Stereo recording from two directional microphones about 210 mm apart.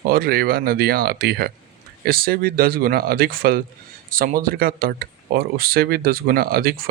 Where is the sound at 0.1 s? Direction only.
45° right (ahead or behind).